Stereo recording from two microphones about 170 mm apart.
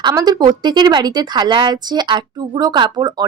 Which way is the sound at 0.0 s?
25° right (ahead or behind).